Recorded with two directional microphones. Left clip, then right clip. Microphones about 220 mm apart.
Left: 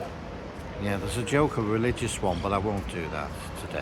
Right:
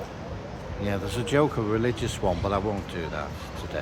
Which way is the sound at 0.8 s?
Centre (ahead or behind).